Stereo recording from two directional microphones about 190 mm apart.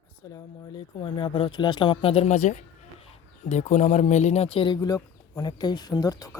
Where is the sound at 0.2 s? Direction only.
20° left (ahead or behind).